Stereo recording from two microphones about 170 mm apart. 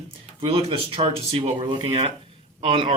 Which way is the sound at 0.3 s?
30° right (ahead or behind).